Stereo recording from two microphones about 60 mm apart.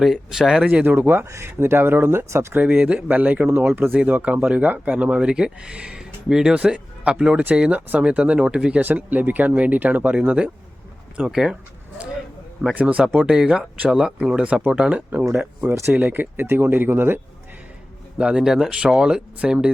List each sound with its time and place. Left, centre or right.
0.0 s speech: centre
0.6 s speech: right
0.9 s speech: right
2.6 s speech: right
3.7 s speech: right; by 8.8 s centre
8.8 s speech: right
11.3 s speech: centre
12.8 s speech: centre; by 17.2 s right
18.2 s speech: centre